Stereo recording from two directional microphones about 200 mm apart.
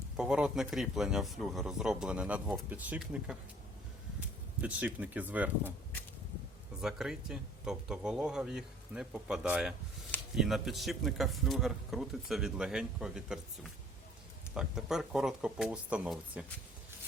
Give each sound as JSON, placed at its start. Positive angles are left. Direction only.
{"t": 0.2, "sound": "speech", "side_deg": -5}
{"t": 4.6, "sound": "speech", "side_deg": -5}
{"t": 6.8, "sound": "speech", "side_deg": -5}
{"t": 14.5, "sound": "speech", "side_deg": -5}